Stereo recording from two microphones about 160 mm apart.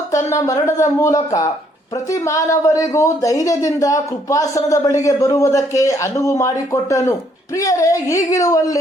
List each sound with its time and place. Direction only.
0.1 s speech: 20° left (ahead or behind)
7.5 s speech: 20° left (ahead or behind)